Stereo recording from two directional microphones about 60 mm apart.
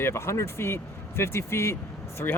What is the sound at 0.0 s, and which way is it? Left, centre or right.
Speech, left.